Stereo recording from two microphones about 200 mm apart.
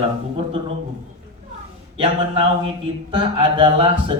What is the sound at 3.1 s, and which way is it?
A man's voice, 25° right (ahead or behind).